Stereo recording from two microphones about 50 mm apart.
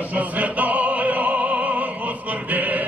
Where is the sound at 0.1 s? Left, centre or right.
Right.